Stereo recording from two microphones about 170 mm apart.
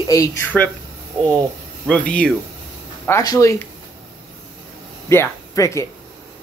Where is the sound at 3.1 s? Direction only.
20° left (ahead or behind).